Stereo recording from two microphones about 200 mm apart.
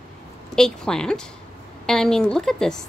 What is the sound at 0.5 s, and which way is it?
A woman's voice, 5° left (ahead or behind).